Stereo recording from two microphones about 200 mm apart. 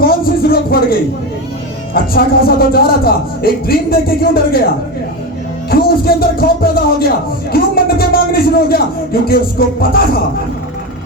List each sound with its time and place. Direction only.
0.0 s a sound: 50° left (ahead or behind)
1.9 s a man's voice: 50° left (ahead or behind)
5.7 s a man's voice: 50° left (ahead or behind)